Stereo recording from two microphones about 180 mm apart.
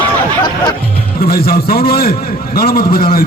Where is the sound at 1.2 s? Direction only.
55° left (ahead or behind).